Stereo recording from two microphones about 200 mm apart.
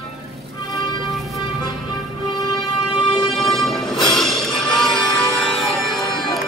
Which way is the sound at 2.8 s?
Centre (ahead or behind).